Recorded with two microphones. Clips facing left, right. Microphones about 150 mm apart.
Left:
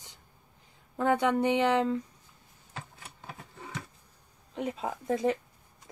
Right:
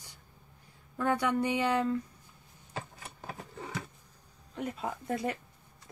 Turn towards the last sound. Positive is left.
turn(degrees=20)  # may be behind; listen again after turning